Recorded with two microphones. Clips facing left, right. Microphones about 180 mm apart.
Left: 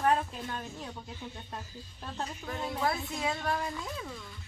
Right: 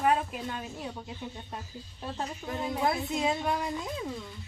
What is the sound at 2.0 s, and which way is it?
Speech, 15° right (ahead or behind).